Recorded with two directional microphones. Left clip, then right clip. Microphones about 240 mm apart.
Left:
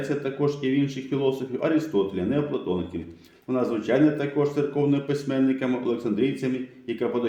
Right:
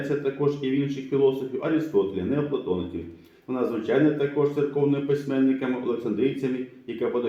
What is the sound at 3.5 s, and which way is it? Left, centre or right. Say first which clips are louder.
Speech: left 1 dB; left.